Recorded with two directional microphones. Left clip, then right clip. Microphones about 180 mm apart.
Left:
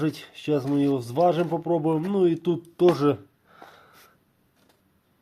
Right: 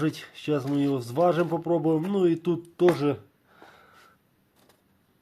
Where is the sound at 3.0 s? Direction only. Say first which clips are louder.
Left 4 dB; 20° left (ahead or behind).